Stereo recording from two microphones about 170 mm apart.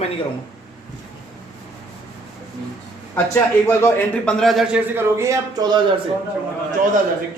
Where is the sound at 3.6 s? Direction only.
10° left (ahead or behind).